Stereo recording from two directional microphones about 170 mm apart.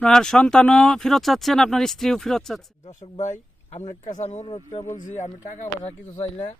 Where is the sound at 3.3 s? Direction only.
45° left (ahead or behind).